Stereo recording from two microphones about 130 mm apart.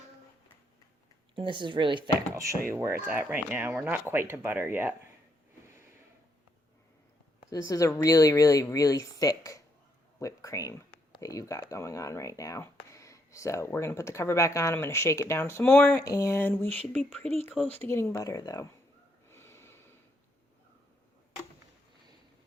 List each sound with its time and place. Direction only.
1.4 s speech: 40° right (ahead or behind)
2.7 s speech: 20° right (ahead or behind)
7.5 s speech: 25° left (ahead or behind)
16.0 s speech: 25° left (ahead or behind); by 17.2 s 5° left (ahead or behind)
17.7 s speech: 15° left (ahead or behind)
19.3 s snort: 20° left (ahead or behind)